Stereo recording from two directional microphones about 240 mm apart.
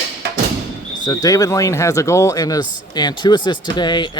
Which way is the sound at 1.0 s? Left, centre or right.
Centre.